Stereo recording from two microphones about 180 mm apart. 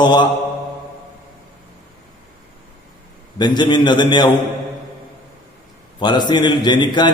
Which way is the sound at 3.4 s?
25° left (ahead or behind).